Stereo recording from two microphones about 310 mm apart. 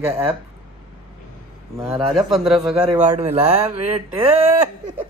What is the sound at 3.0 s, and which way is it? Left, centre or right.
Speech, centre.